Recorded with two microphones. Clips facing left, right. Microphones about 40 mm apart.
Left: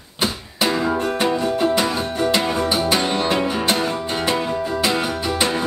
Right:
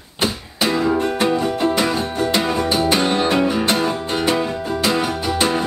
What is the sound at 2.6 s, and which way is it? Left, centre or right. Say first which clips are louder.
Music: right 2 dB; centre.